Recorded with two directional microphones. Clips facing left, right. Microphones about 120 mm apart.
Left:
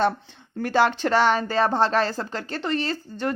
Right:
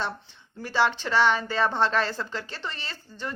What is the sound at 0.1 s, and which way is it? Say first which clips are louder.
Speech: left 5 dB; 80° left.